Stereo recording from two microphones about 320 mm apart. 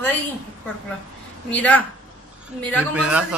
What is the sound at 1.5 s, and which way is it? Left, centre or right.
Speech, centre.